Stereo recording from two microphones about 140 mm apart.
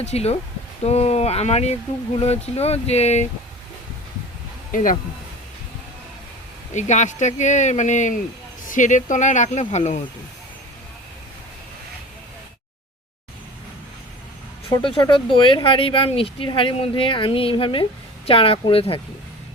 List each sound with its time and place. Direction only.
0.0 s speech: 50° left (ahead or behind)
4.7 s speech: 70° left (ahead or behind)
6.7 s speech: 60° left (ahead or behind)
14.7 s speech: 35° left (ahead or behind)